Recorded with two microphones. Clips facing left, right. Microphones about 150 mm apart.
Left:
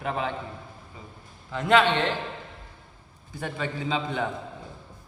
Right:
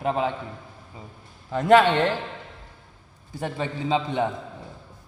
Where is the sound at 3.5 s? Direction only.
25° right (ahead or behind).